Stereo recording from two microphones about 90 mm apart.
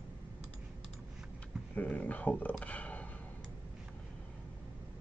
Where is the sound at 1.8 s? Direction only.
15° left (ahead or behind).